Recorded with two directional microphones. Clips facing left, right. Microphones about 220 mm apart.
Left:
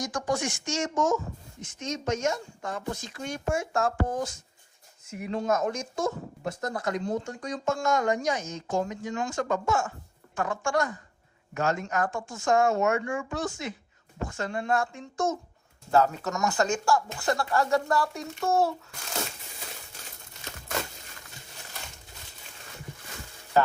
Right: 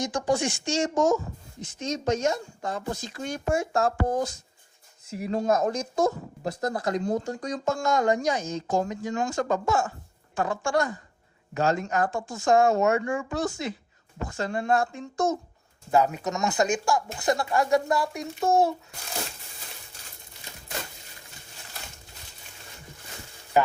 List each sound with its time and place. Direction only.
0.0 s speech: 30° right (ahead or behind)
15.9 s speech: 15° right (ahead or behind)
23.6 s speech: 15° right (ahead or behind)